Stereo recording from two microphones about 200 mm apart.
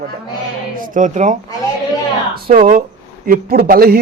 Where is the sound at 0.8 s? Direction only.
40° right (ahead or behind).